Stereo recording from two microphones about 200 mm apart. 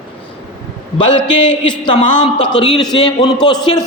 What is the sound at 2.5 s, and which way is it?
A man's voice, 20° left (ahead or behind).